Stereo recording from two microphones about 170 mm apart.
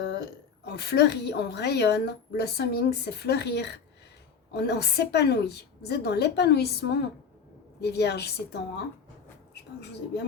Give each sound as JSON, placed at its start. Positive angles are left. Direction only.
{"t": 0.0, "sound": "a woman's voice", "side_deg": 90}